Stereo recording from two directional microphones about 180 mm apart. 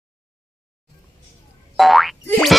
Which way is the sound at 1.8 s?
Centre (ahead or behind).